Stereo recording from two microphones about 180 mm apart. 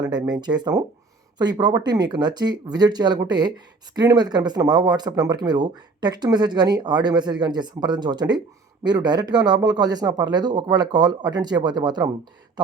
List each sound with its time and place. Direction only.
0.0 s speech: 25° right (ahead or behind)